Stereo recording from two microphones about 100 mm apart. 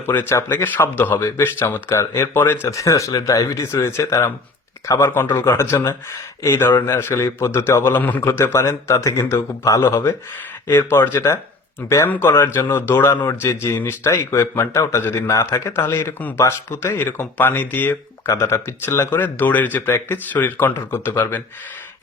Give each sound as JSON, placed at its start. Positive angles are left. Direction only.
{"t": 0.0, "sound": "speech", "side_deg": 25}
{"t": 2.6, "sound": "speech", "side_deg": 35}